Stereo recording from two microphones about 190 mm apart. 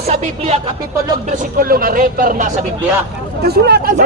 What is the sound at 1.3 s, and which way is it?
A man's voice, 45° right (ahead or behind).